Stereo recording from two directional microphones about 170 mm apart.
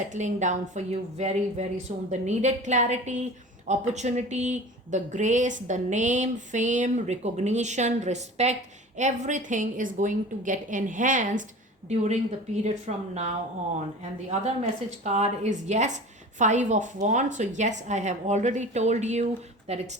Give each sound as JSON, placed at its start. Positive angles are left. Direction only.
{"t": 0.1, "sound": "a woman's voice", "side_deg": -45}
{"t": 12.6, "sound": "a woman's voice", "side_deg": -40}